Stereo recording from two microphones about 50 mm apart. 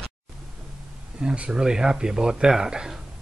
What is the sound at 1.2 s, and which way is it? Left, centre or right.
Speech, centre.